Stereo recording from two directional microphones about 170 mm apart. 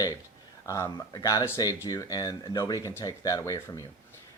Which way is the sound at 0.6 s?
20° left (ahead or behind).